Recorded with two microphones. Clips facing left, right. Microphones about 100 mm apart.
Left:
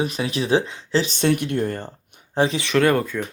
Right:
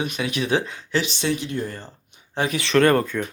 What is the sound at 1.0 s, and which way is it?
Speech, 45° left (ahead or behind).